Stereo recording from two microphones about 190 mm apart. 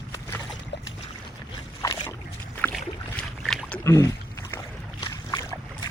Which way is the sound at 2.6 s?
5° left (ahead or behind).